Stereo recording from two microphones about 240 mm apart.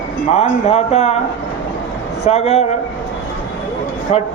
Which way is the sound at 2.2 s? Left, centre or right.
Left.